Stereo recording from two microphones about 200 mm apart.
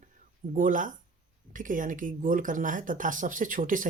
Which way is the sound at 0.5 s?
40° right (ahead or behind).